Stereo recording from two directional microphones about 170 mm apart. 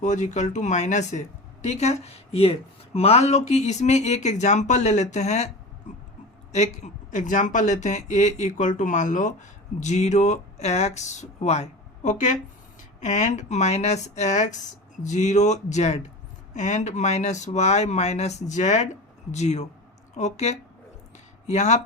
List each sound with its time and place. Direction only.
0.0 s speech: 45° left (ahead or behind)
5.9 s a sound: 45° left (ahead or behind)
6.5 s speech: 40° left (ahead or behind)